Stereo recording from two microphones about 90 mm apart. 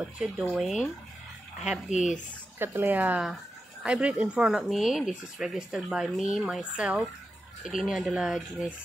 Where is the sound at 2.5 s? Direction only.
20° right (ahead or behind).